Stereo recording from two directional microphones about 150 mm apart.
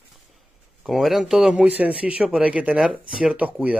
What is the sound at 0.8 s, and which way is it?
A man's voice, centre (ahead or behind).